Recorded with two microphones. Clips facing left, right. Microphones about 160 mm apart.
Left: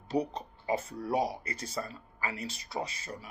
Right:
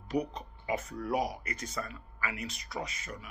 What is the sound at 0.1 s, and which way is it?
A man's voice, 30° left (ahead or behind).